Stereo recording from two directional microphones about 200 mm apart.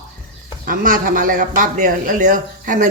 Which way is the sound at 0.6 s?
45° right (ahead or behind).